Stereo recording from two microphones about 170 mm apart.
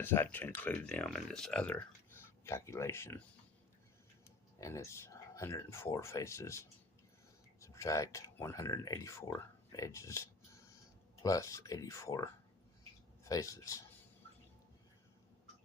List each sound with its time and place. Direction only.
0.0 s speech: 15° left (ahead or behind)
4.6 s speech: 15° left (ahead or behind)